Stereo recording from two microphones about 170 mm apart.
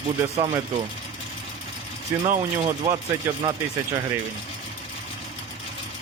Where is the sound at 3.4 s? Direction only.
25° right (ahead or behind).